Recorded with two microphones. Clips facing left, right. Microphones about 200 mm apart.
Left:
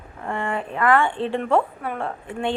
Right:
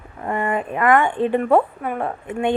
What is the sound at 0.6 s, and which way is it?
A woman's voice, 10° right (ahead or behind).